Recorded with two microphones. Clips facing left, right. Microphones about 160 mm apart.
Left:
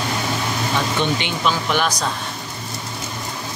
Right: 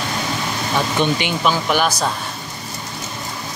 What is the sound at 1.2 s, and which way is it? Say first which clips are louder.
Speech: right 2 dB; 5° right (ahead or behind).